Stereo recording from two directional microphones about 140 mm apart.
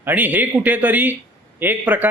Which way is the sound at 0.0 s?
10° right (ahead or behind).